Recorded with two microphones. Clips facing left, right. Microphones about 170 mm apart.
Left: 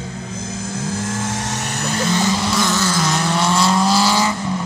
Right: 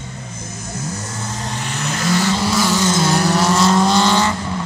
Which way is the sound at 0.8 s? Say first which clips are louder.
Left 6 dB; 90° left.